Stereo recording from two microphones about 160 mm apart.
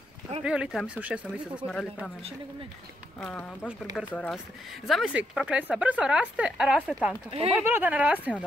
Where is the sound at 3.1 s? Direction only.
5° left (ahead or behind).